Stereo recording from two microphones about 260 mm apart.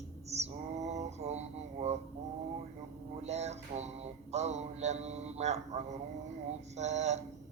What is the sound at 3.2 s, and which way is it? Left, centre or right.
Mantra, right.